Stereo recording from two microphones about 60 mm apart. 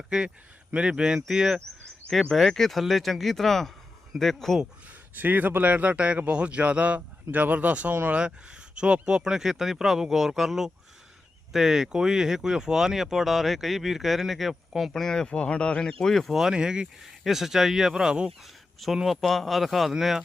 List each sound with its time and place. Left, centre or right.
0.1 s speech: centre
2.3 s speech: centre
5.1 s a man's voice: right
8.2 s speech: centre
14.9 s speech: centre
18.9 s speech: centre